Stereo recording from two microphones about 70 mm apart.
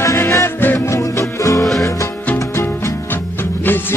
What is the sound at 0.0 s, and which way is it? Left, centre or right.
Music, left.